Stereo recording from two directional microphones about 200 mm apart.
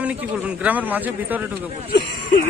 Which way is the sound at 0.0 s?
5° right (ahead or behind).